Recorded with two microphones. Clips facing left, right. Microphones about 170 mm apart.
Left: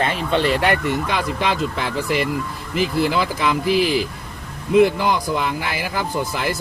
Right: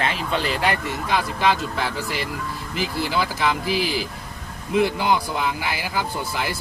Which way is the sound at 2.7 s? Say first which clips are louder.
Left 5 dB; 50° left (ahead or behind).